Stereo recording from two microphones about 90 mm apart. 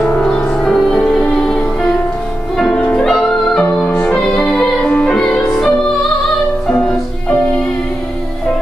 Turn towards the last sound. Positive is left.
turn(degrees=15)  # may be behind; listen again after turning